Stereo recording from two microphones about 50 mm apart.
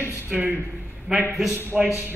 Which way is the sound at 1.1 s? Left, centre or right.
Centre.